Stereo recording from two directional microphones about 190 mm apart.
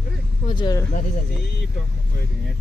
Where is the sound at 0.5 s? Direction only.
20° left (ahead or behind).